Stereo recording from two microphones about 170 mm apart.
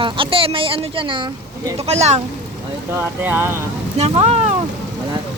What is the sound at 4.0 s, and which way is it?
Speech, 40° right (ahead or behind).